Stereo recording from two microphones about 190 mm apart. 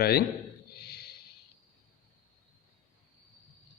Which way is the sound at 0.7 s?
55° left (ahead or behind).